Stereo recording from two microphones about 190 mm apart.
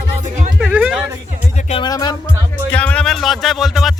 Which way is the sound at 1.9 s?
20° left (ahead or behind).